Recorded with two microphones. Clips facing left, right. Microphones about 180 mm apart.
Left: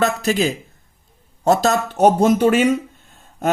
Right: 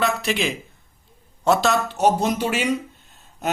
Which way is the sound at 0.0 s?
40° left (ahead or behind).